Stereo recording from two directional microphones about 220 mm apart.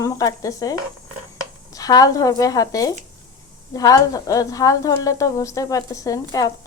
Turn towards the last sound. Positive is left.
turn(degrees=15)  # may be behind; listen again after turning